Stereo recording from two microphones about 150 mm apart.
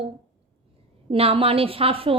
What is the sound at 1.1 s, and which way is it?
A woman's voice, 40° right (ahead or behind).